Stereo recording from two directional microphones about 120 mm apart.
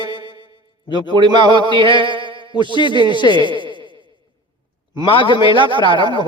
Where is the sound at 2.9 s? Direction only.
40° right (ahead or behind).